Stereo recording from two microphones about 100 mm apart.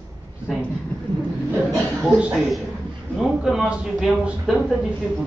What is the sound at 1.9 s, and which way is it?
Speech, 10° right (ahead or behind).